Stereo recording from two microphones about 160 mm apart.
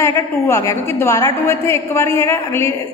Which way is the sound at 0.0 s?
15° left (ahead or behind).